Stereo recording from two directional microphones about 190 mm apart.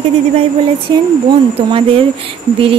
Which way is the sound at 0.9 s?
25° right (ahead or behind).